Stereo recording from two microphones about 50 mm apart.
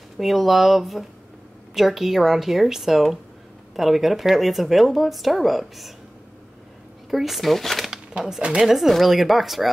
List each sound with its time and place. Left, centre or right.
0.2 s a woman's voice: centre
7.1 s speech: centre
8.4 s speech: centre
8.6 s a woman's voice: centre